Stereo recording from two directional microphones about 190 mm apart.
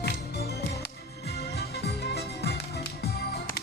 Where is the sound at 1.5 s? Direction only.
55° left (ahead or behind).